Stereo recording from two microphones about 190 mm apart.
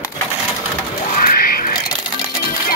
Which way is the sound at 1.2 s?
50° left (ahead or behind).